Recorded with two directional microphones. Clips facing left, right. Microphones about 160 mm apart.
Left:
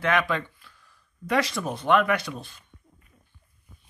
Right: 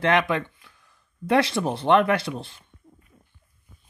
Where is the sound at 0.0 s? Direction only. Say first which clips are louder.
Right 3 dB; 25° right (ahead or behind).